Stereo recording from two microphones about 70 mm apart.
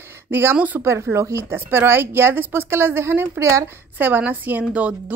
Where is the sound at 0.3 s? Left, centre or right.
Right.